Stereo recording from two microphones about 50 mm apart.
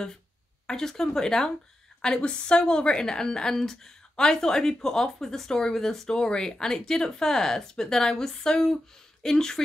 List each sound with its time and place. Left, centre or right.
0.7 s speech: centre